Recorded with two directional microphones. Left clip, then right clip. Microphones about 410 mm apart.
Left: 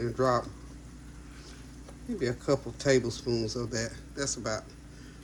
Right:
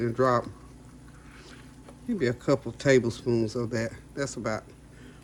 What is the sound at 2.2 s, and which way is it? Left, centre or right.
Cutlery, right.